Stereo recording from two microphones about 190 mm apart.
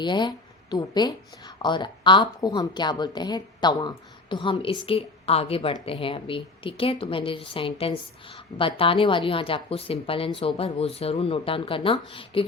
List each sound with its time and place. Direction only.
0.0 s a woman's voice: 25° left (ahead or behind)